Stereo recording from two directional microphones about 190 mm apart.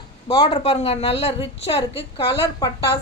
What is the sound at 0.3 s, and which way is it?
A woman's voice, 30° left (ahead or behind).